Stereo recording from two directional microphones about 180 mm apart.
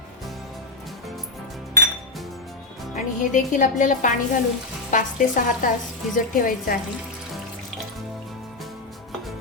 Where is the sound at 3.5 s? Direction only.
45° left (ahead or behind).